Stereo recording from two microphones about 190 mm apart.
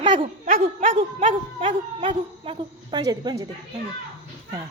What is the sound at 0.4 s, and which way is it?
Speech, 50° right (ahead or behind).